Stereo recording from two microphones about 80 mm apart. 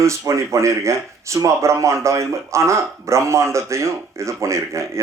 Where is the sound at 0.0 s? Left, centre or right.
Right.